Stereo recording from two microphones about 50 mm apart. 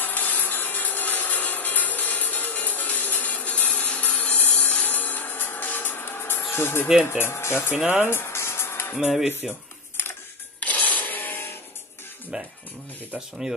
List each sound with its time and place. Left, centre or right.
0.0 s sawing: left
7.1 s speech: left
7.8 s speech: right
8.1 s music: left
9.0 s speech: centre
10.6 s a sound: left